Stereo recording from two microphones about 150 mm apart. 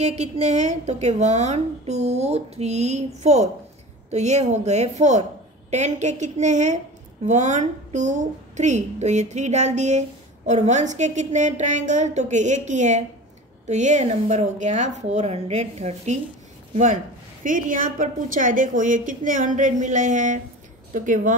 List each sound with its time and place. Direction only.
0.2 s a woman's voice: 50° right (ahead or behind)